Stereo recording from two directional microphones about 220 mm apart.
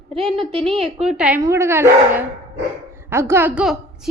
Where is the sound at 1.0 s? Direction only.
5° right (ahead or behind).